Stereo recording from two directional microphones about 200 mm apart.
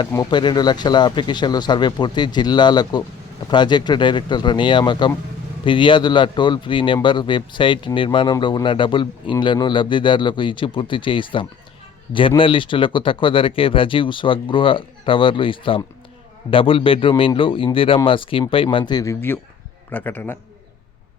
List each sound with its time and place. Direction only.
0.1 s a man's voice: 20° left (ahead or behind)